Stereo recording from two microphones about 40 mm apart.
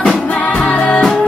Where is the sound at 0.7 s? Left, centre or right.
Left.